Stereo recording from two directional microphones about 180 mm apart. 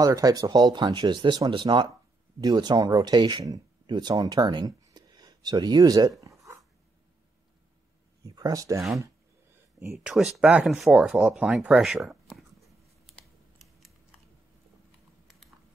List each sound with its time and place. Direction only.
0.0 s speech: 20° right (ahead or behind)
8.2 s speech: 20° right (ahead or behind)
9.8 s speech: 10° right (ahead or behind)